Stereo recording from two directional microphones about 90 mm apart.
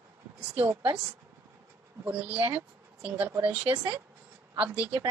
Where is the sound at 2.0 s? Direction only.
20° right (ahead or behind).